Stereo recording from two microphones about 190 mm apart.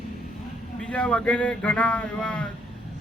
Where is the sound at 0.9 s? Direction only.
5° left (ahead or behind).